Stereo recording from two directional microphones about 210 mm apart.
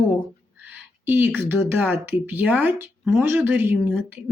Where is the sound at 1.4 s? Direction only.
10° right (ahead or behind).